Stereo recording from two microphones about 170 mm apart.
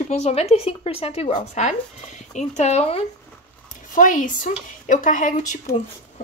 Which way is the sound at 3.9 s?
50° left (ahead or behind).